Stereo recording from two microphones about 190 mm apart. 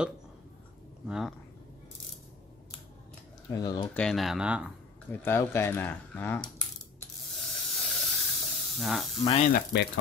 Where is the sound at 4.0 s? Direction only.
Centre (ahead or behind).